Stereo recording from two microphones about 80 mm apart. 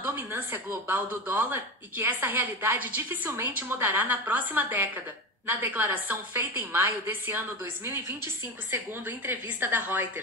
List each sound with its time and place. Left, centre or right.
0.0 s speech: right